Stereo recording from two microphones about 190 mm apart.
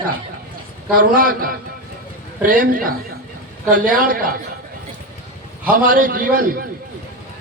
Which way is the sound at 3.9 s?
50° right (ahead or behind).